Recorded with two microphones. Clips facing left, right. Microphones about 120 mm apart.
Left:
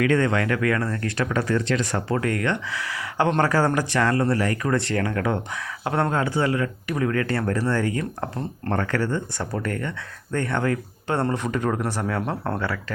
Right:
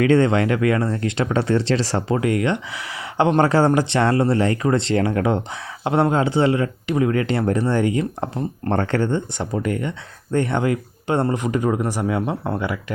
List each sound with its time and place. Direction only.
0.0 s speech: 25° right (ahead or behind)
2.0 s speech: 15° right (ahead or behind)
8.7 s speech: 30° right (ahead or behind)